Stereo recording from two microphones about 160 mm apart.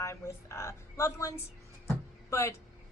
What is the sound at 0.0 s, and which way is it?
Speech, 15° left (ahead or behind).